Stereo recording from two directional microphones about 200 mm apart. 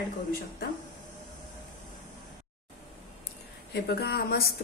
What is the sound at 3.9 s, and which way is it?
Speech, 55° left (ahead or behind).